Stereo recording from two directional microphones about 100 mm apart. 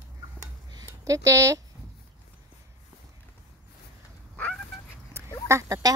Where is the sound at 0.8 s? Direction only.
35° right (ahead or behind).